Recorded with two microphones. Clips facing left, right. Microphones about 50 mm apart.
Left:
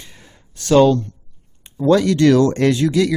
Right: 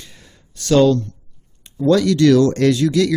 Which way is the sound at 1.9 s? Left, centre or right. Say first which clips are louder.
Even; left.